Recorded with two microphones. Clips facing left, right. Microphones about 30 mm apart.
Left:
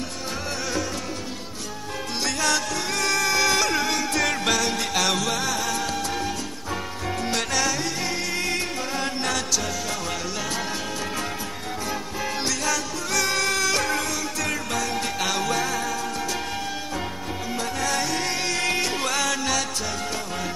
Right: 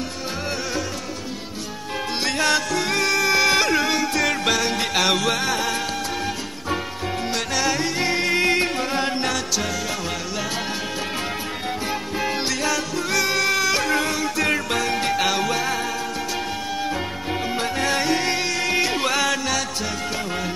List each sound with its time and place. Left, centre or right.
2.2 s music: right
3.1 s music: centre
4.1 s music: centre; by 5.8 s right
7.2 s music: centre
7.6 s music: right
11.9 s music: right
13.9 s music: right
15.2 s music: centre
17.6 s music: right
18.5 s music: centre
18.8 s music: centre